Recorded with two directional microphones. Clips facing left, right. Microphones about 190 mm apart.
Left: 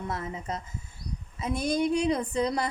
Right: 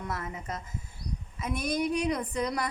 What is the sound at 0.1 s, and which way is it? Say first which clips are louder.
A woman's voice: left 3 dB; 25° left (ahead or behind).